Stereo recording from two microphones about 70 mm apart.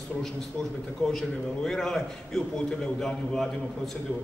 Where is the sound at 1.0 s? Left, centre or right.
Centre.